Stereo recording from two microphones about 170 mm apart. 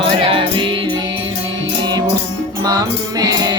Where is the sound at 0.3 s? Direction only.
30° right (ahead or behind).